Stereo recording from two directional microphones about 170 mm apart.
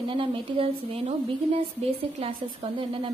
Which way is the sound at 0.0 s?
30° right (ahead or behind).